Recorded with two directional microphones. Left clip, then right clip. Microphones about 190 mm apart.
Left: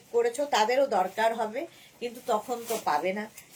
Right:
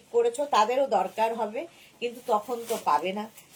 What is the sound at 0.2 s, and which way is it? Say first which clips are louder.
Speech: right 2 dB; 20° left (ahead or behind).